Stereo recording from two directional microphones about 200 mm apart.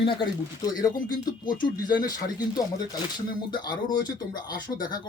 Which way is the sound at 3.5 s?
20° left (ahead or behind).